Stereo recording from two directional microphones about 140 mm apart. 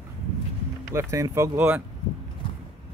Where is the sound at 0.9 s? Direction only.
20° right (ahead or behind).